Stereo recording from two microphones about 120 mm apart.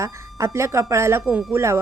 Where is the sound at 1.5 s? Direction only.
20° right (ahead or behind).